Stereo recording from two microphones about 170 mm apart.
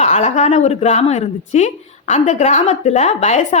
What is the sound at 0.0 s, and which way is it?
A woman's voice, 40° left (ahead or behind).